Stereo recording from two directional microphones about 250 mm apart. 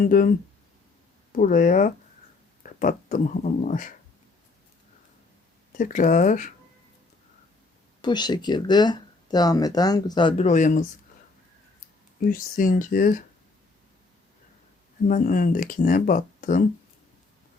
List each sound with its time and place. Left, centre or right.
0.0 s speech: left
1.4 s speech: left
5.7 s speech: left
8.0 s speech: centre
12.2 s speech: left
15.0 s speech: left